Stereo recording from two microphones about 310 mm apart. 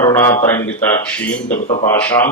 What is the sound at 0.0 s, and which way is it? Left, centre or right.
Speech, centre.